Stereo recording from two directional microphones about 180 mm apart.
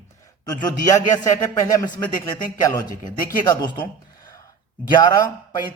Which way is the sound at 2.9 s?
45° left (ahead or behind).